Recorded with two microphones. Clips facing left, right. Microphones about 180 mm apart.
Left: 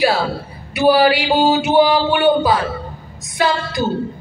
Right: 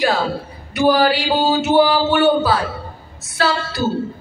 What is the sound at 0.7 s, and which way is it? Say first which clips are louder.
Mantra: left 2 dB; 10° left (ahead or behind).